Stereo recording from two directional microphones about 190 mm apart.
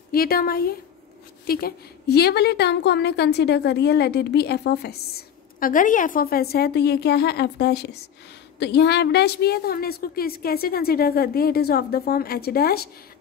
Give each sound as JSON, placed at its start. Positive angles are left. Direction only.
{"t": 0.1, "sound": "a woman's voice", "side_deg": 50}